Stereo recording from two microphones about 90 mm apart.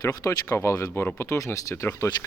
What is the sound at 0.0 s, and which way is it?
Speech, 40° left (ahead or behind).